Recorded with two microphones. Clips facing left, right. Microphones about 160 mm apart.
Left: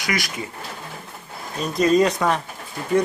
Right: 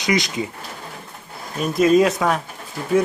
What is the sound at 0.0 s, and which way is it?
Speech, 20° right (ahead or behind).